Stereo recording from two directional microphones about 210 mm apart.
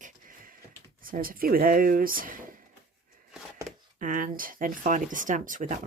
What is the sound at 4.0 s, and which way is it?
Speech, 40° right (ahead or behind).